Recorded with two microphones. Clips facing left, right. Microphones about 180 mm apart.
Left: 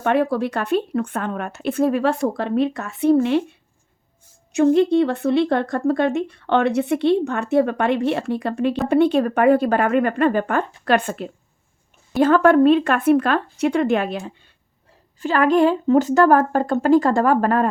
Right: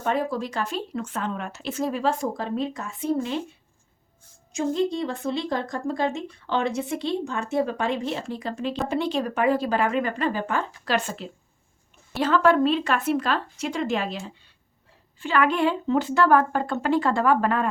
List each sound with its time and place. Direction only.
0.0 s speech: 65° left (ahead or behind)
4.5 s speech: 65° left (ahead or behind)
15.2 s speech: 40° left (ahead or behind)